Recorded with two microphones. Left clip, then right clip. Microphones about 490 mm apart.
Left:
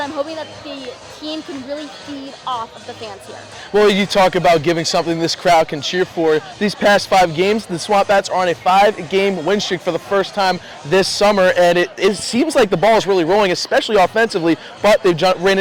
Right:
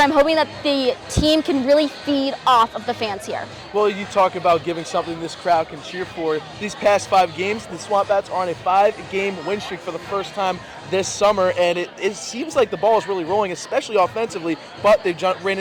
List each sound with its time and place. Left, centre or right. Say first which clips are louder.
0.0 s a woman's voice: right 8 dB; right
3.8 s a man's voice: left 5 dB; left
11.0 s a man's voice: left 3 dB; left